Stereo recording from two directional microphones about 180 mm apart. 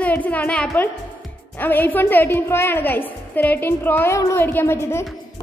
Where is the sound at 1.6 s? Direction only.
10° left (ahead or behind).